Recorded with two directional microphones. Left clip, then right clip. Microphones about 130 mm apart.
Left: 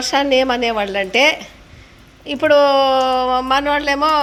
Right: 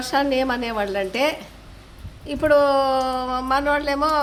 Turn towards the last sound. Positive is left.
turn(degrees=15)  # may be behind; listen again after turning